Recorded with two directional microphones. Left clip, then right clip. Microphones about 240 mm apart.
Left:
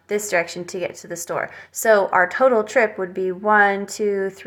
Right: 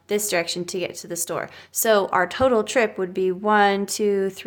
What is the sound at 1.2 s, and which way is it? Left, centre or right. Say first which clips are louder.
Speech: left 6 dB; right.